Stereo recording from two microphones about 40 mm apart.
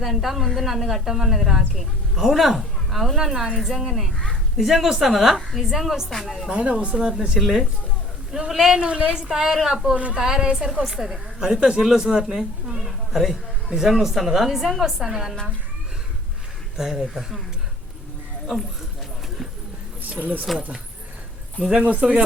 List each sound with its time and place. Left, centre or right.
0.0 s a woman's voice: centre
6.1 s a woman's voice: centre
6.5 s a woman's voice: right
7.1 s a woman's voice: centre
8.8 s a woman's voice: right
9.7 s a woman's voice: right
10.2 s a woman's voice: centre
12.8 s a sound: centre
13.7 s a woman's voice: centre
16.7 s a woman's voice: centre
20.1 s speech: right
22.0 s a woman's voice: centre